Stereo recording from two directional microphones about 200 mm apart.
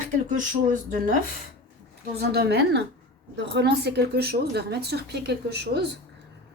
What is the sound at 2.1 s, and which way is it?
A woman's voice, 55° right (ahead or behind).